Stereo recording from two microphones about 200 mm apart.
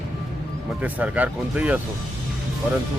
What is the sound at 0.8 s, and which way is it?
Speech, 10° right (ahead or behind).